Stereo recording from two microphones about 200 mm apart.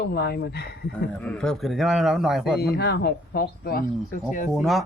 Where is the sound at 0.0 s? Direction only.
50° left (ahead or behind).